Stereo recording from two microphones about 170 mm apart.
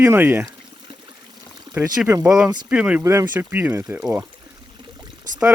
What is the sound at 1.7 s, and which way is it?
Speech, 15° right (ahead or behind).